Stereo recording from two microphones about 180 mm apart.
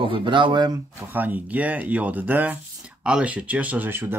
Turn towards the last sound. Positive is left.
turn(degrees=-10)  # may be behind; listen again after turning